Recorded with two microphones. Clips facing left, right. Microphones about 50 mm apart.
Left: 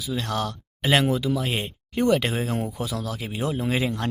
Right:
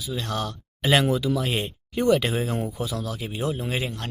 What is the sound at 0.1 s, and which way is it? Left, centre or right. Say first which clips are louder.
Speech: left 2 dB; left.